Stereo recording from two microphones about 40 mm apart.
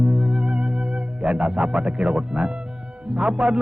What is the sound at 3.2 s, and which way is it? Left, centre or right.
Music, right.